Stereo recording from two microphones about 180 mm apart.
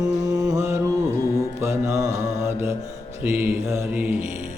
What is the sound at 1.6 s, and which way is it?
Mantra, 15° right (ahead or behind).